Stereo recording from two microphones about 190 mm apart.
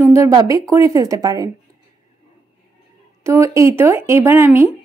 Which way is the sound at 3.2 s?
15° right (ahead or behind).